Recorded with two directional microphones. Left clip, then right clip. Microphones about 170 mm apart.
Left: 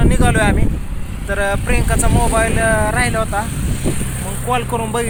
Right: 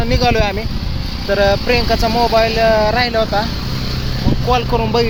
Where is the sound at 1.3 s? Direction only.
35° right (ahead or behind).